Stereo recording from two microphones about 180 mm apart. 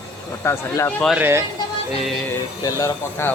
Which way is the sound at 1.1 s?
15° right (ahead or behind).